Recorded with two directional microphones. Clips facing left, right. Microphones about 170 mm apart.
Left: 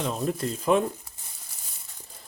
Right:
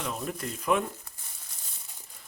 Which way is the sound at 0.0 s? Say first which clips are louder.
Left 6 dB; 30° left (ahead or behind).